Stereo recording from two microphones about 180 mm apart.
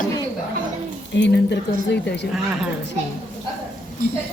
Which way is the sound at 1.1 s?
75° left (ahead or behind).